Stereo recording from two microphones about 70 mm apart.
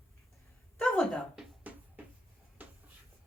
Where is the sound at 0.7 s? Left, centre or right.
Centre.